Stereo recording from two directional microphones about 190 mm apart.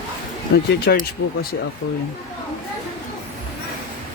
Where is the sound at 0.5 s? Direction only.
60° left (ahead or behind).